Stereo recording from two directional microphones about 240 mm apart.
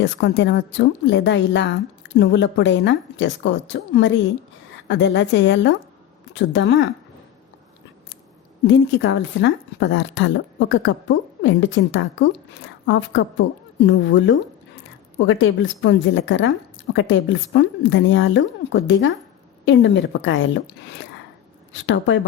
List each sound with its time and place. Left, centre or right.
0.0 s speech: left
8.6 s speech: left
21.7 s speech: left